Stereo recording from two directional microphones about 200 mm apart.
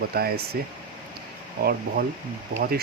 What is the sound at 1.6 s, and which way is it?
Speech, 50° right (ahead or behind).